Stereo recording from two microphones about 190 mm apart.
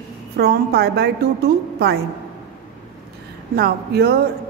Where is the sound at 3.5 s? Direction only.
55° right (ahead or behind).